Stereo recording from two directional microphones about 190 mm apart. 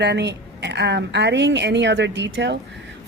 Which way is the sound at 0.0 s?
65° right (ahead or behind).